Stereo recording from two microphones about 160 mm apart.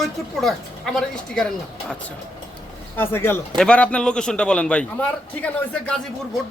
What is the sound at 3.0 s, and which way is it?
A man's voice, 15° left (ahead or behind).